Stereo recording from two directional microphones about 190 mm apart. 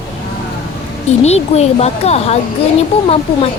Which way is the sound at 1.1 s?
35° left (ahead or behind).